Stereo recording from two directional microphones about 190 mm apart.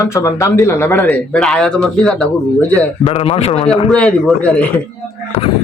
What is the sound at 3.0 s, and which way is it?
Speech, 30° left (ahead or behind).